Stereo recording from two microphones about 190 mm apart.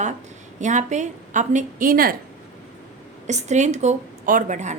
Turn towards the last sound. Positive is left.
turn(degrees=-40)  # may be behind; listen again after turning